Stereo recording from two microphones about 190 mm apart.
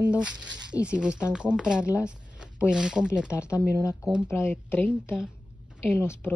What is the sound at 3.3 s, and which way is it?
Speech, 15° left (ahead or behind).